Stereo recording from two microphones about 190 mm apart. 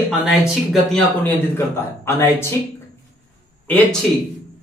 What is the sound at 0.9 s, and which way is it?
A man's voice, 10° left (ahead or behind).